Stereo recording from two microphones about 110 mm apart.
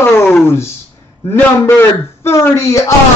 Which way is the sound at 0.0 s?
20° left (ahead or behind).